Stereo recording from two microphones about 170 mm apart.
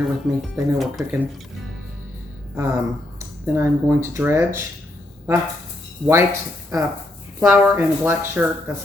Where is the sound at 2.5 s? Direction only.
15° right (ahead or behind).